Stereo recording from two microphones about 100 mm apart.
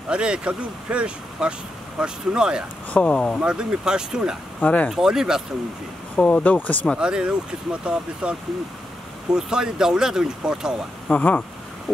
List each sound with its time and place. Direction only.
0.1 s speech: 10° right (ahead or behind)
2.9 s speech: 10° left (ahead or behind)
3.4 s speech: 10° right (ahead or behind)
4.6 s speech: 15° left (ahead or behind)
4.9 s speech: 5° right (ahead or behind)
6.1 s speech: 15° left (ahead or behind)
7.0 s speech: 10° right (ahead or behind)
11.1 s speech: 15° left (ahead or behind)